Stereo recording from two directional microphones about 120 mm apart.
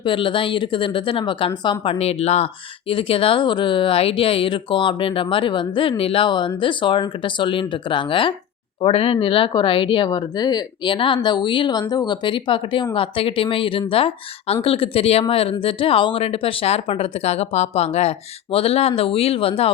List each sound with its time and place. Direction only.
0.0 s speech: 45° left (ahead or behind)